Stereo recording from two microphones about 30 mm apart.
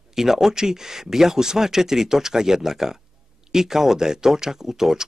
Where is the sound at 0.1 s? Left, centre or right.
Centre.